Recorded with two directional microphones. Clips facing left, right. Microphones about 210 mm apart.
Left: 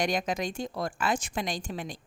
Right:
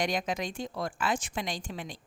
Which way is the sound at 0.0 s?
45° left (ahead or behind).